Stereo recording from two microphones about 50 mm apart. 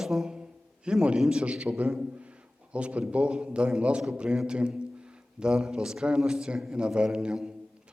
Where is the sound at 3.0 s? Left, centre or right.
Right.